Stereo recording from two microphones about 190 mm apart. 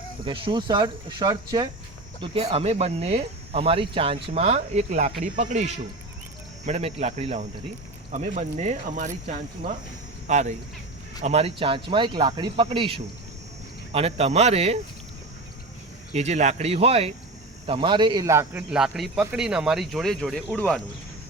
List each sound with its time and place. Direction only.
0.3 s speech: 25° right (ahead or behind)
10.2 s speech: 40° right (ahead or behind)
16.1 s a man's voice: 35° right (ahead or behind); by 20.8 s 5° left (ahead or behind)